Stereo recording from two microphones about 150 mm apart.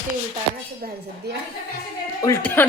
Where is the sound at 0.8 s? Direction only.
90° right.